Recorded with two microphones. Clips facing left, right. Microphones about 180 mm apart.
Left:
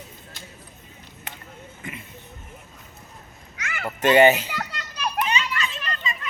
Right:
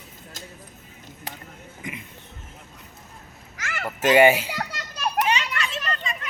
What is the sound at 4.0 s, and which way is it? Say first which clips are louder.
Speech: even; 10° right (ahead or behind).